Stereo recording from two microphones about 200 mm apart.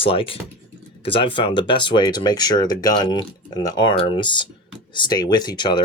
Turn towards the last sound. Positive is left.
turn(degrees=20)  # may be behind; listen again after turning